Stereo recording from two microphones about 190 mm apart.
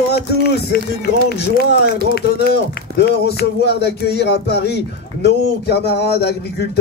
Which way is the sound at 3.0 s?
60° left (ahead or behind).